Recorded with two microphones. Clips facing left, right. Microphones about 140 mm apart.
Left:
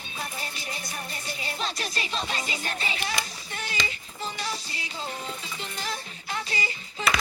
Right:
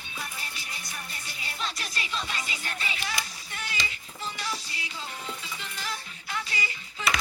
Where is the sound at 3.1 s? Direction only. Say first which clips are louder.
Left 3 dB; 30° left (ahead or behind).